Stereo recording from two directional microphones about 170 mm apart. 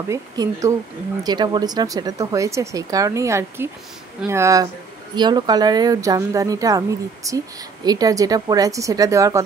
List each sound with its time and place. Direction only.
0.1 s speech: 20° right (ahead or behind)